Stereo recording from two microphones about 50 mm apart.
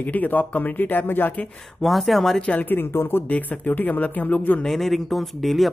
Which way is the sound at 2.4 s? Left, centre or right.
Left.